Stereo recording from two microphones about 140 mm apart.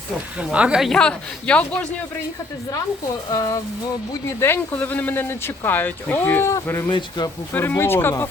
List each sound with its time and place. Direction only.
0.3 s speech: 10° right (ahead or behind); by 1.9 s 10° left (ahead or behind)
3.2 s speech: 25° left (ahead or behind)